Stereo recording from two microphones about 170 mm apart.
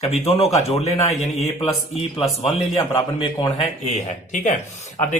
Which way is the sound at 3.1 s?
30° left (ahead or behind).